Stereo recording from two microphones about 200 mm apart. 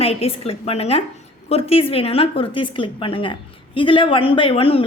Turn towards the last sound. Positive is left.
turn(degrees=30)  # may be behind; listen again after turning